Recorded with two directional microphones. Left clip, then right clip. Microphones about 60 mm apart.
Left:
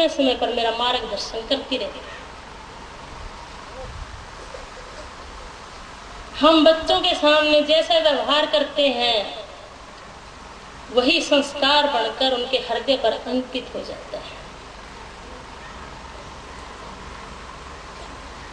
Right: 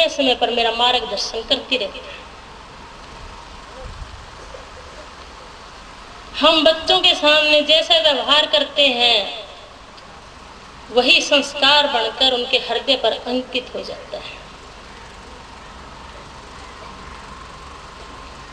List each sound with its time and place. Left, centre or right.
0.0 s a woman's voice: right
6.3 s a man's voice: right
11.0 s a woman's voice: right